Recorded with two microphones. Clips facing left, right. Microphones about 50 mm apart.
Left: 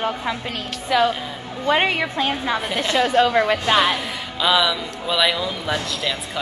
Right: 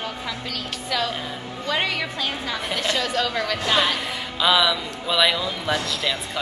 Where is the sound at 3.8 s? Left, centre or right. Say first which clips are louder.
Left 3 dB; centre.